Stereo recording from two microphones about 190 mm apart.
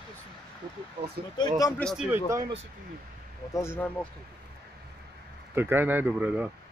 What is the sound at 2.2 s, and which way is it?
Speech, 15° right (ahead or behind).